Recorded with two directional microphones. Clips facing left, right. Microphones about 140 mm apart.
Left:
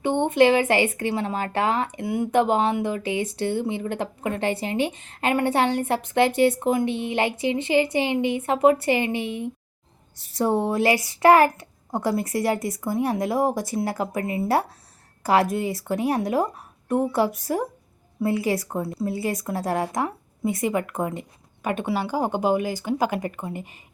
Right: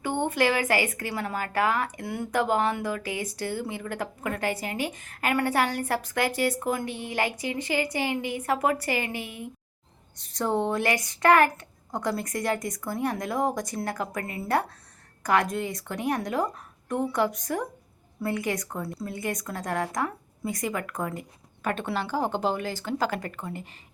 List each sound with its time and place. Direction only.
0.0 s a woman's voice: 25° left (ahead or behind)